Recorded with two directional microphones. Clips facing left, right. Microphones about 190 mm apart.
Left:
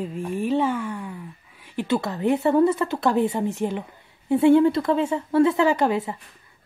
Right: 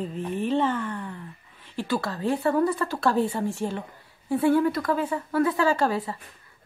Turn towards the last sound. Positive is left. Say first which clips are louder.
# left 3 dB
turn(degrees=20)  # may be behind; listen again after turning